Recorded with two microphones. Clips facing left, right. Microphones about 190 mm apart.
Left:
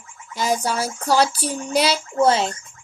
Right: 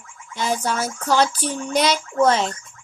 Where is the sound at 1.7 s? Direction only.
30° left (ahead or behind).